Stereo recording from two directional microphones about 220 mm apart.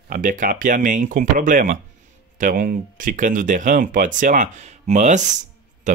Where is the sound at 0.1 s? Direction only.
35° right (ahead or behind).